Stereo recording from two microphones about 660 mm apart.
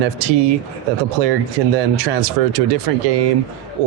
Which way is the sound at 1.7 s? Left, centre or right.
Right.